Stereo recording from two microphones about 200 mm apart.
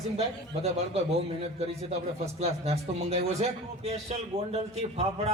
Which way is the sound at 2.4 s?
30° right (ahead or behind).